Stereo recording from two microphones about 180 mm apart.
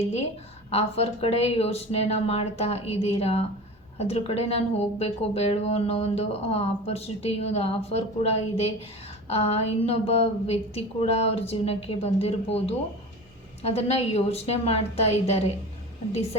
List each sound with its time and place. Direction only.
0.7 s speech: 35° left (ahead or behind)